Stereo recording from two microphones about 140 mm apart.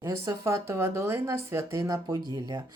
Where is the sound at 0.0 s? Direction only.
20° right (ahead or behind).